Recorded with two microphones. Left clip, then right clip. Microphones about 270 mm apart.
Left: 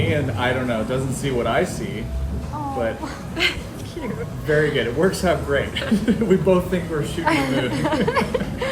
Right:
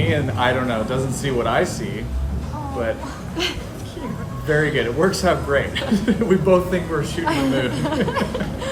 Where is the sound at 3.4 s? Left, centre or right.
Centre.